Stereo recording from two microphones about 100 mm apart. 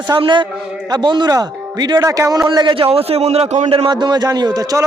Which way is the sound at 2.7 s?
75° right (ahead or behind).